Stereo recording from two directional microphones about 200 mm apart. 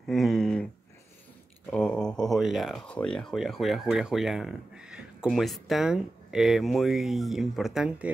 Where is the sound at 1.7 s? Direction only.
5° left (ahead or behind).